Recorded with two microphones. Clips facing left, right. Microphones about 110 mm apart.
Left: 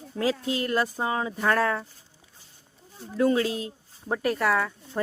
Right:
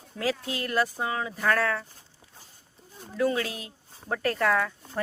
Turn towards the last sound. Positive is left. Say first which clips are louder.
# left 1 dB
turn(degrees=5)  # may be behind; listen again after turning